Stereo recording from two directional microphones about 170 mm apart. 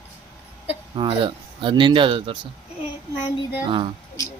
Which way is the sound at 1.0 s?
30° right (ahead or behind).